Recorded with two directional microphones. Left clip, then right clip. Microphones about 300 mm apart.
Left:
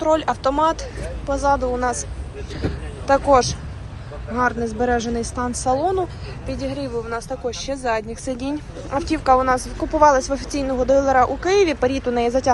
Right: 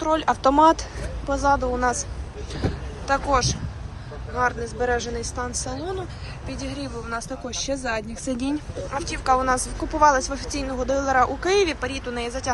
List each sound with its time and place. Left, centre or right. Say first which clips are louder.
0.0 s speech: left 2 dB; centre
4.4 s a woman's voice: left 3 dB; centre
6.5 s speech: left 7 dB; centre
8.9 s a woman's voice: left 5 dB; centre
9.5 s speech: left 4 dB; centre